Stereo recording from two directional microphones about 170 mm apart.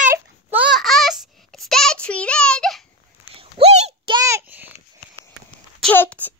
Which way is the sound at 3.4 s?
35° right (ahead or behind).